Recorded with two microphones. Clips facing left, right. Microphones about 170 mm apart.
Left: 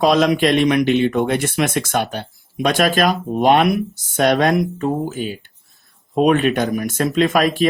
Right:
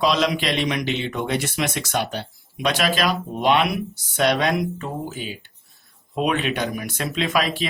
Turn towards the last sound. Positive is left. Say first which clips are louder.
# left 7 dB
turn(degrees=50)  # may be behind; listen again after turning